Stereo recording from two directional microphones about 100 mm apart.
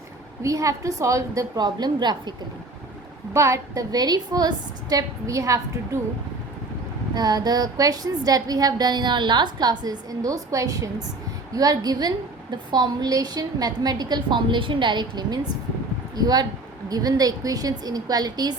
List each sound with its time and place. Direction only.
0.4 s a woman's voice: 35° right (ahead or behind)
3.3 s a woman's voice: 30° right (ahead or behind)
7.1 s a woman's voice: 45° right (ahead or behind)
16.1 s a woman's voice: 40° right (ahead or behind)